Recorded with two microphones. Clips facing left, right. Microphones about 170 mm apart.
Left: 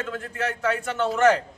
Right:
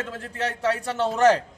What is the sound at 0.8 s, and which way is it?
Speech, 35° right (ahead or behind).